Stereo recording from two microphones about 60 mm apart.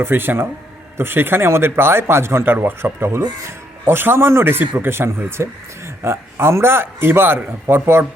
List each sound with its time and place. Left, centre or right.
0.0 s a man's voice: right